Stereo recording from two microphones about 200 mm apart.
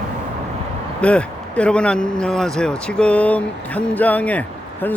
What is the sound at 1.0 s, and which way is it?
Speech, 5° left (ahead or behind).